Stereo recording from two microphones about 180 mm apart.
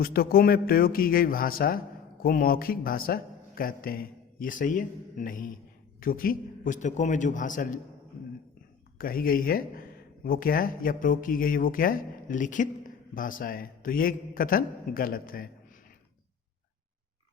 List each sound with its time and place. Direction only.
0.0 s a man's voice: 55° left (ahead or behind)
9.0 s a man's voice: 55° left (ahead or behind)